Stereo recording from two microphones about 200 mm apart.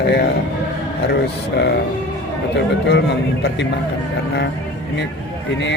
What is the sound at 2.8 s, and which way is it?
Speech, 60° left (ahead or behind).